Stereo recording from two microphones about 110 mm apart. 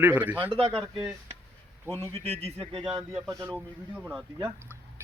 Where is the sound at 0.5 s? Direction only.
55° right (ahead or behind).